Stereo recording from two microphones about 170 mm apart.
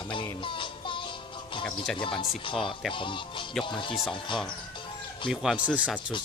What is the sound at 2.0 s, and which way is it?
Speech, 30° left (ahead or behind).